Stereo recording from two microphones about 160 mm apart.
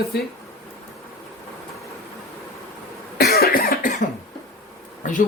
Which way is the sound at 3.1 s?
75° left (ahead or behind).